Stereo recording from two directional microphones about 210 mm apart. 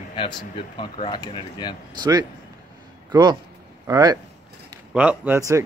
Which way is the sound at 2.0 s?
20° right (ahead or behind).